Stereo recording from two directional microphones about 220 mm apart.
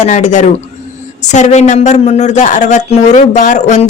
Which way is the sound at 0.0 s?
35° left (ahead or behind).